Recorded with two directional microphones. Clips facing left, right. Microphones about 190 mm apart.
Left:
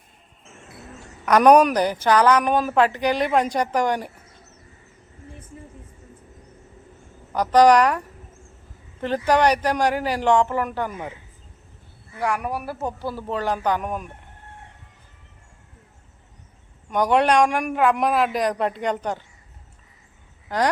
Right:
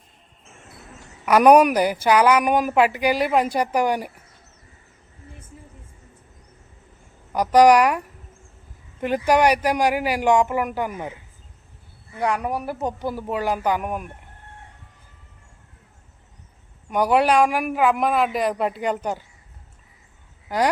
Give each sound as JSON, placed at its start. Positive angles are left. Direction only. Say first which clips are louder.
{"t": 1.2, "sound": "a woman's voice", "louder": "right 1 dB", "side_deg": -10}
{"t": 7.3, "sound": "a woman's voice", "louder": "right 1 dB", "side_deg": -10}
{"t": 12.1, "sound": "a woman's voice", "louder": "right 2 dB", "side_deg": -20}
{"t": 16.9, "sound": "a man's voice", "louder": "even", "side_deg": -5}
{"t": 20.5, "sound": "a woman's voice", "louder": "right 1 dB", "side_deg": -10}